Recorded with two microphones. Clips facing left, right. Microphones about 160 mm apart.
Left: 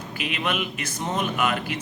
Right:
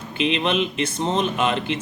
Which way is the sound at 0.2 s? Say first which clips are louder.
Right 7 dB; 25° right (ahead or behind).